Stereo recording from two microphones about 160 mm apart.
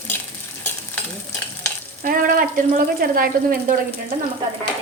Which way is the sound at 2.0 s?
60° right (ahead or behind).